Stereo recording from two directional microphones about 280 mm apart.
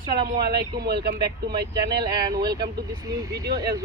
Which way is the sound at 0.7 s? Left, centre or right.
Right.